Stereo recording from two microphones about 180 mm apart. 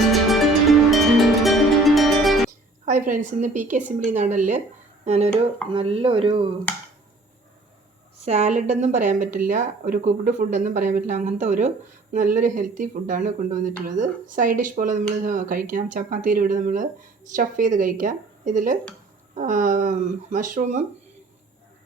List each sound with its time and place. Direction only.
0.1 s music: centre (ahead or behind)
2.8 s speech: 45° right (ahead or behind); by 6.5 s 30° right (ahead or behind)
8.2 s speech: 40° right (ahead or behind)